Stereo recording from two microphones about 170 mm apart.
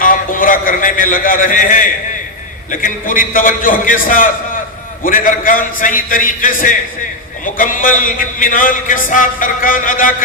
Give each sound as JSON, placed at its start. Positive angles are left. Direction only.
{"t": 0.0, "sound": "a man's voice", "side_deg": 55}